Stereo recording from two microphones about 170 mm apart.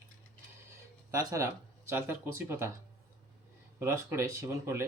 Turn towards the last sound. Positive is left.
turn(degrees=-15)  # may be behind; listen again after turning